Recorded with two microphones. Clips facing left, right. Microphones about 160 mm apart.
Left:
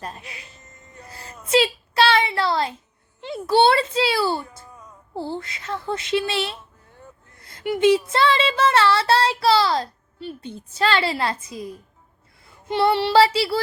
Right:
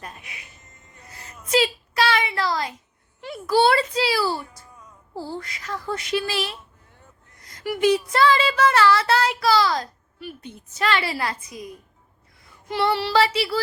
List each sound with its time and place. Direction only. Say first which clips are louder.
0.0 s speech: left 5 dB; 30° left (ahead or behind)
1.0 s a sound: left 3 dB; 30° left (ahead or behind)
5.1 s child singing: left 3 dB; 25° left (ahead or behind)